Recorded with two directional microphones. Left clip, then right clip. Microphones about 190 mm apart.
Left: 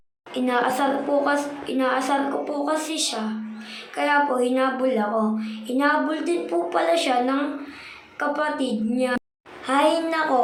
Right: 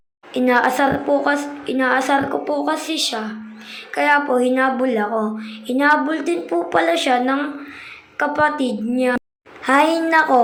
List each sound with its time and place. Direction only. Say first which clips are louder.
0.3 s a woman's voice: right 6 dB; 25° right (ahead or behind)